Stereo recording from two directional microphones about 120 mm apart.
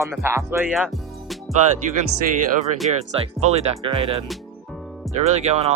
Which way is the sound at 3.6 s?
55° right (ahead or behind).